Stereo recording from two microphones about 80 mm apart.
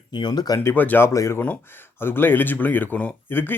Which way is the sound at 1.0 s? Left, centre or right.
Left.